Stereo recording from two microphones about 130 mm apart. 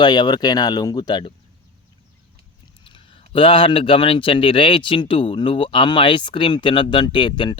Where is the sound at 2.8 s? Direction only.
40° left (ahead or behind).